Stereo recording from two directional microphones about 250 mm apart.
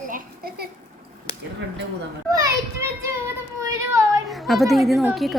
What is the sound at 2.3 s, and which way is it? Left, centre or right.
Speech, centre.